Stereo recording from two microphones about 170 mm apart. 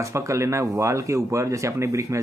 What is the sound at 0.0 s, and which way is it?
Speech, 15° right (ahead or behind).